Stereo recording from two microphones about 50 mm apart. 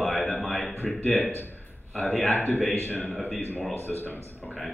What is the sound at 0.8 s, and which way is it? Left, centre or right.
A man's voice, left.